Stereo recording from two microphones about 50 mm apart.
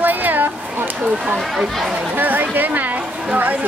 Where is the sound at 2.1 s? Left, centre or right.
Right.